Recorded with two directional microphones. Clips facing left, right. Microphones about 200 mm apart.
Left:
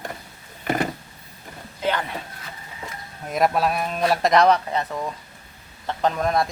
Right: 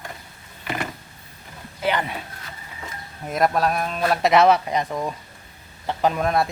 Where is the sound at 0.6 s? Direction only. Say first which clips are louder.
Left 5 dB; 45° left (ahead or behind).